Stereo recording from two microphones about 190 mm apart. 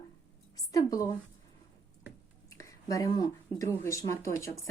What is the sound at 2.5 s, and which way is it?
Speech, 15° left (ahead or behind).